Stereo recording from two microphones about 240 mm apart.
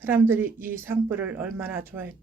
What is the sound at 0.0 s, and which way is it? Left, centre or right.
Speech, centre.